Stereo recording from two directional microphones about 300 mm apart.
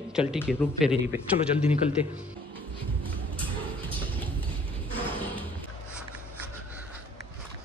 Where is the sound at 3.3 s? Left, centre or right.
Centre.